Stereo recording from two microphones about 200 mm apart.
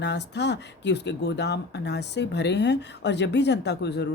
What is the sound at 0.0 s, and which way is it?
A woman's voice, 60° left (ahead or behind).